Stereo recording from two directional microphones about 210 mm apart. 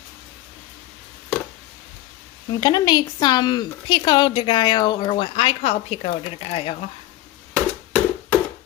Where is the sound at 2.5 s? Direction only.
20° left (ahead or behind).